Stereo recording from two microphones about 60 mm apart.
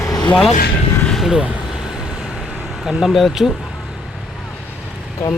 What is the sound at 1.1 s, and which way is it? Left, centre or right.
Vehicle, centre.